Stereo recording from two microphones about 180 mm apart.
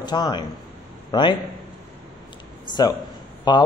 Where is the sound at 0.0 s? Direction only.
25° left (ahead or behind).